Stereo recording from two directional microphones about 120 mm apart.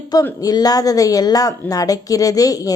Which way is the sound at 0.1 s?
30° left (ahead or behind).